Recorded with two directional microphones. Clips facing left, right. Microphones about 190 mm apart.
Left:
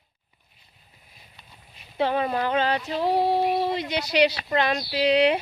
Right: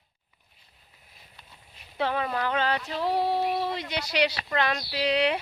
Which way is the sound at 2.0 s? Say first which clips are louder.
Left 4 dB; 25° left (ahead or behind).